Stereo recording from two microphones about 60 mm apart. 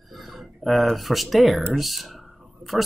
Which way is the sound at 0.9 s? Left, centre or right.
Centre.